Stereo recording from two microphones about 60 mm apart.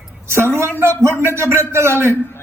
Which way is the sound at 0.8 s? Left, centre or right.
Right.